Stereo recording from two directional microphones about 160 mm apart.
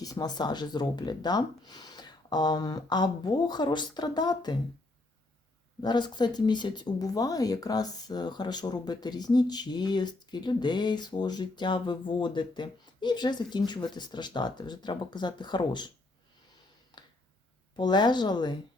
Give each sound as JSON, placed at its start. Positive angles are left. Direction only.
{"t": 0.0, "sound": "speech", "side_deg": 25}
{"t": 5.8, "sound": "speech", "side_deg": 25}
{"t": 16.9, "sound": "a sound", "side_deg": 25}
{"t": 17.7, "sound": "speech", "side_deg": 30}